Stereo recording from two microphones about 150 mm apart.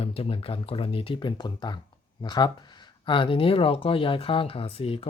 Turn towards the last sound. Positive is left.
turn(degrees=40)  # may be behind; listen again after turning